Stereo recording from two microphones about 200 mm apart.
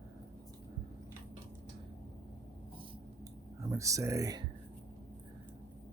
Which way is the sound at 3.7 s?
15° right (ahead or behind).